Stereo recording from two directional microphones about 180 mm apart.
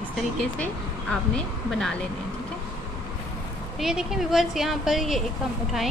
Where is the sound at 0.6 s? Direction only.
5° left (ahead or behind).